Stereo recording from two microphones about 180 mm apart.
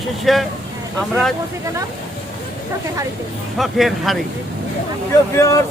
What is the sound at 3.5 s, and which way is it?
Speech, centre (ahead or behind).